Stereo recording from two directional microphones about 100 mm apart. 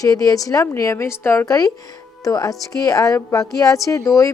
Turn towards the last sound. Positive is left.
turn(degrees=35)  # may be behind; listen again after turning